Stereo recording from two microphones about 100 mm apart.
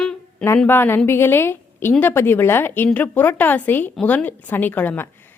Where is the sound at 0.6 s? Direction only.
20° left (ahead or behind).